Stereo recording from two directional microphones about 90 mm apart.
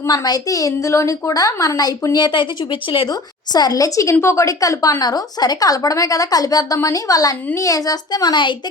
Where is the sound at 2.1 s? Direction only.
55° left (ahead or behind).